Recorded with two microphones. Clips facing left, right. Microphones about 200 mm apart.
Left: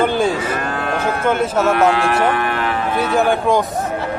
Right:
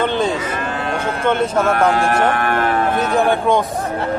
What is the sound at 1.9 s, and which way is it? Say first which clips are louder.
Speech: even; 45° right (ahead or behind).